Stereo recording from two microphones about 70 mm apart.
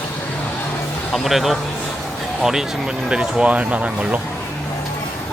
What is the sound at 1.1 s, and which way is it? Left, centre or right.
Speech, centre.